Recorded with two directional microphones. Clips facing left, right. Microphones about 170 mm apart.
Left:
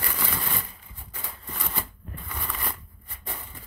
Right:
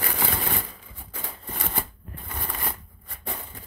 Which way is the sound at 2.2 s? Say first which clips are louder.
Right 1 dB; 40° right (ahead or behind).